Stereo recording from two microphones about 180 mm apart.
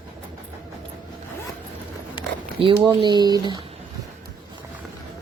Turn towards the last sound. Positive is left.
turn(degrees=-25)  # may be behind; listen again after turning